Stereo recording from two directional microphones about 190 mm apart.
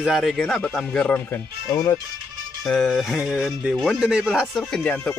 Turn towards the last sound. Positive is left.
turn(degrees=5)  # may be behind; listen again after turning